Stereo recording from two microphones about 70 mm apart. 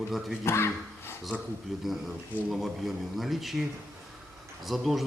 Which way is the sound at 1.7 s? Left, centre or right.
Centre.